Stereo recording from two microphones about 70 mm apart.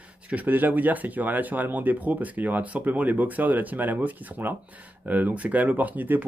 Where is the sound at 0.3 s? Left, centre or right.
Right.